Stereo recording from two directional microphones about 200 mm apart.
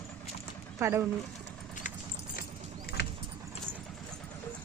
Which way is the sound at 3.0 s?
50° left (ahead or behind).